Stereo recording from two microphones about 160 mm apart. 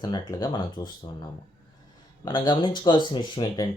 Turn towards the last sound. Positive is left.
turn(degrees=30)  # may be behind; listen again after turning